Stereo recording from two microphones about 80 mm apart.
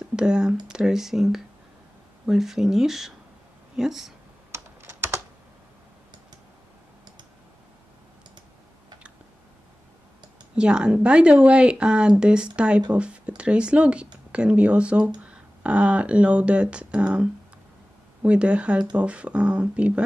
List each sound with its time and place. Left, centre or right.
0.0 s speech: centre
4.5 s typing: right
10.5 s speech: centre